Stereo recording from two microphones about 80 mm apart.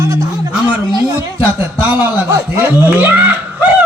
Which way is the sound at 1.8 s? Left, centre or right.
Right.